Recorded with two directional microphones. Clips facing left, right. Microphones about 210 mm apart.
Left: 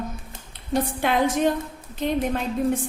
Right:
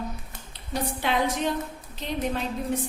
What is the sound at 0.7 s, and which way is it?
A woman's voice, 50° left (ahead or behind).